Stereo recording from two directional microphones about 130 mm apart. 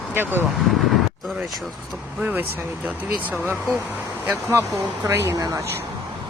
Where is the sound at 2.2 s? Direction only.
10° right (ahead or behind).